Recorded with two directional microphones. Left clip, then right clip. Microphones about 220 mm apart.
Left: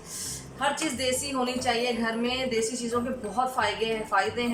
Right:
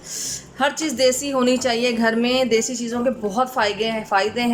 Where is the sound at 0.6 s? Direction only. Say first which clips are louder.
Right 9 dB; 45° right (ahead or behind).